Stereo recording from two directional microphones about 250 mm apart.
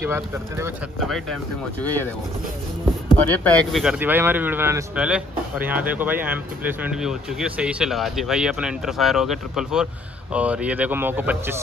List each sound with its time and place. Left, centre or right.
0.0 s speech: centre
0.9 s speech: centre
3.1 s speech: centre